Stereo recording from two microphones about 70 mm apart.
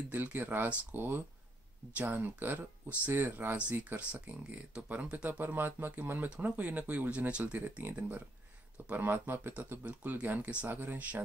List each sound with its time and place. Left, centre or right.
0.1 s speech: right
3.5 s speech: centre